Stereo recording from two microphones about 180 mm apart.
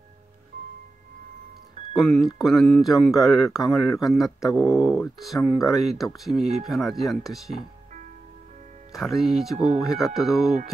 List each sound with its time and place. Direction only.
1.8 s music: 40° right (ahead or behind)
2.3 s speech: centre (ahead or behind)
4.5 s speech: 20° left (ahead or behind)
4.7 s speech: 5° right (ahead or behind)
8.9 s speech: centre (ahead or behind)